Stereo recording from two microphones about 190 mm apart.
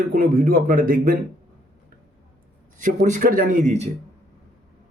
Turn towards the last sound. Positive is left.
turn(degrees=-35)  # may be behind; listen again after turning